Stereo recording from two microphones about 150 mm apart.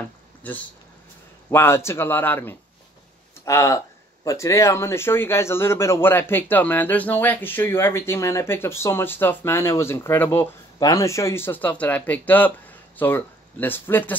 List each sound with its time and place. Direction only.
1.5 s speech: 15° left (ahead or behind)